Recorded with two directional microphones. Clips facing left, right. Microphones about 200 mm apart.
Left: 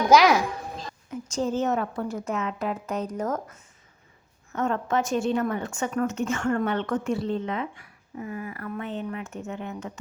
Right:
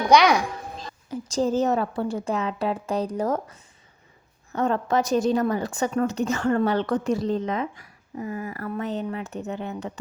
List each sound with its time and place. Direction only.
0.1 s a child's voice: centre (ahead or behind)
1.1 s speech: 35° right (ahead or behind)
4.5 s speech: 35° right (ahead or behind)